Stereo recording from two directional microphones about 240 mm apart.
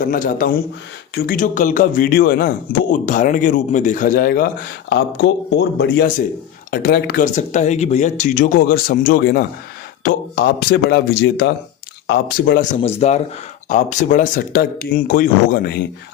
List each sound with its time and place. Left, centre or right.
0.0 s speech: left
12.7 s speech: left